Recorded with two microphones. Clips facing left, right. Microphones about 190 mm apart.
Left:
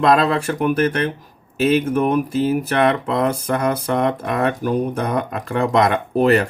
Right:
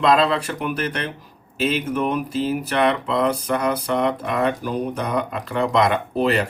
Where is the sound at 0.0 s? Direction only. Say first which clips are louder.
Left 2 dB; 45° left (ahead or behind).